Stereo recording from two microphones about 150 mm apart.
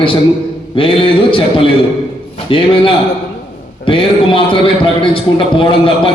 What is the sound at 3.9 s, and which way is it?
A man's voice, 35° left (ahead or behind).